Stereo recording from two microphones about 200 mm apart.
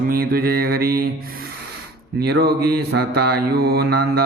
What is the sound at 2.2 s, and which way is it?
Music, 50° right (ahead or behind).